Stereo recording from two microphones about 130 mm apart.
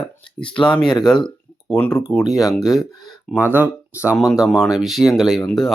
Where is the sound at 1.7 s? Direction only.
5° left (ahead or behind).